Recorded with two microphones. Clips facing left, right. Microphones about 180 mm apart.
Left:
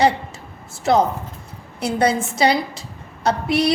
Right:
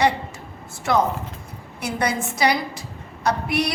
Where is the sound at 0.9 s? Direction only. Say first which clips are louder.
Left 3 dB; 25° left (ahead or behind).